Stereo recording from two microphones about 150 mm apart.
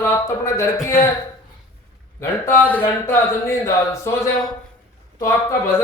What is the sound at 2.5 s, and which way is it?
A man's voice, 10° left (ahead or behind).